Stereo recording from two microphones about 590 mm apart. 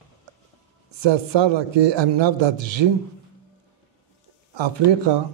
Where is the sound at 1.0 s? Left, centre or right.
Right.